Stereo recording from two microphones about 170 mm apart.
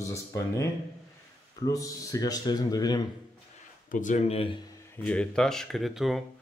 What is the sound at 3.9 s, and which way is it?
Speech, 50° left (ahead or behind).